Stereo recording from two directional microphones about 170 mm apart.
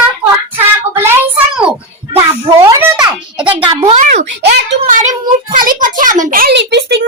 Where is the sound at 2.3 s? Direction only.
15° right (ahead or behind).